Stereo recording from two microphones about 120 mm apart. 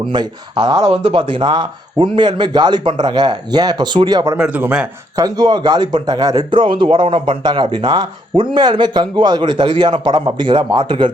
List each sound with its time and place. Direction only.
0.0 s a man's voice: 40° right (ahead or behind)
4.4 s speech: 10° right (ahead or behind)
5.1 s a man's voice: 35° right (ahead or behind)